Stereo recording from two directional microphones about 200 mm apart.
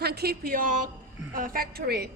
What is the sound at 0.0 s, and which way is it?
A woman's voice, 50° right (ahead or behind).